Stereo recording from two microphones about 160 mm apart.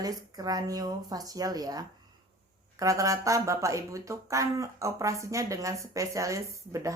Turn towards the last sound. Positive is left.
turn(degrees=-20)  # may be behind; listen again after turning